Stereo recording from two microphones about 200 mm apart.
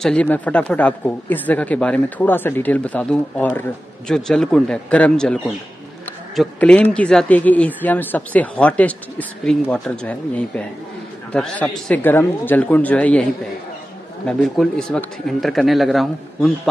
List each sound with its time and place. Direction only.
0.0 s speech: 5° left (ahead or behind)